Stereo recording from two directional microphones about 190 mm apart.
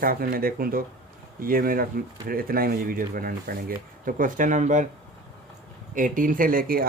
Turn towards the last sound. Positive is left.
turn(degrees=-50)  # may be behind; listen again after turning